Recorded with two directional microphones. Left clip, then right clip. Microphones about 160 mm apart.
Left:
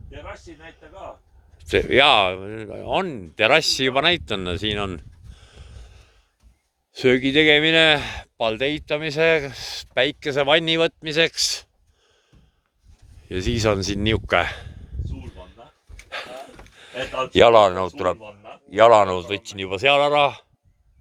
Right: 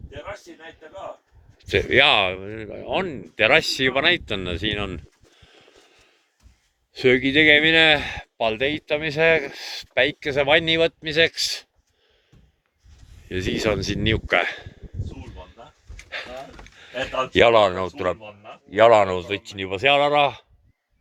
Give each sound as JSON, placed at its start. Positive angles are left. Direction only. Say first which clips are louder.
{"t": 0.1, "sound": "a man's voice", "louder": "right 2 dB", "side_deg": -60}
{"t": 1.5, "sound": "a man's voice", "louder": "left 1 dB", "side_deg": 45}
{"t": 13.2, "sound": "speech", "louder": "left 1 dB", "side_deg": 30}
{"t": 16.0, "sound": "a sound", "louder": "even", "side_deg": 35}
{"t": 18.2, "sound": "a sound", "louder": "even", "side_deg": 40}
{"t": 18.7, "sound": "a man's voice", "louder": "left 1 dB", "side_deg": 20}